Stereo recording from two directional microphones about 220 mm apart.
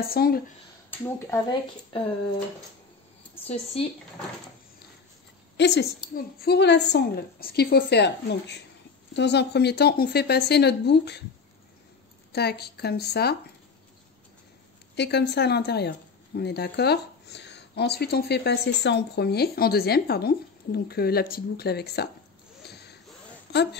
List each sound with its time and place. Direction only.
0.0 s speech: 45° left (ahead or behind)
1.0 s speech: 10° left (ahead or behind)
3.8 s speech: 25° left (ahead or behind)
5.6 s speech: 50° left (ahead or behind)
12.3 s speech: 45° left (ahead or behind)
15.0 s speech: 50° left (ahead or behind)
22.7 s a sound: 50° left (ahead or behind)
23.5 s speech: 50° left (ahead or behind)